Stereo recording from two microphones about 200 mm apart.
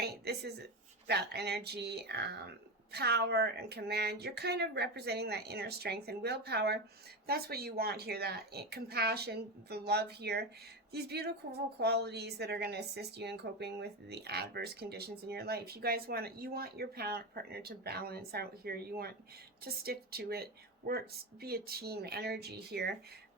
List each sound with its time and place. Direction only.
0.0 s a woman's voice: 55° right (ahead or behind)